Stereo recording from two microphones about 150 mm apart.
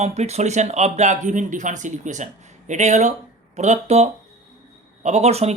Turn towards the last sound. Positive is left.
turn(degrees=-45)  # may be behind; listen again after turning